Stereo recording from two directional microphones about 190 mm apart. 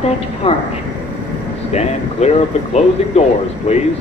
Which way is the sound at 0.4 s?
30° left (ahead or behind).